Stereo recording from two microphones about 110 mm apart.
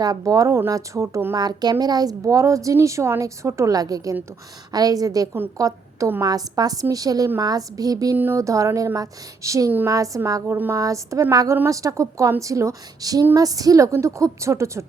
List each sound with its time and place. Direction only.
0.0 s a woman's voice: 35° right (ahead or behind)
1.4 s a woman's voice: 40° right (ahead or behind)
8.1 s a woman's voice: 20° right (ahead or behind)